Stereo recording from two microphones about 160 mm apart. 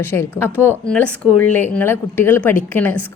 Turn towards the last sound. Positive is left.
turn(degrees=10)  # may be behind; listen again after turning